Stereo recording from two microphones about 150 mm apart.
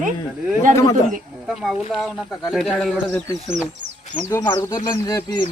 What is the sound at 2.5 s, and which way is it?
Speech, centre (ahead or behind).